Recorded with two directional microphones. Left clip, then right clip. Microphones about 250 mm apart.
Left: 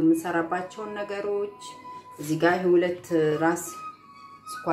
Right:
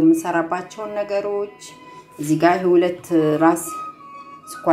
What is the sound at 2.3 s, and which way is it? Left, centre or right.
Speech, centre.